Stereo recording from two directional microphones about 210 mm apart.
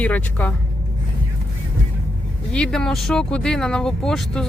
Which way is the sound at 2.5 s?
5° left (ahead or behind).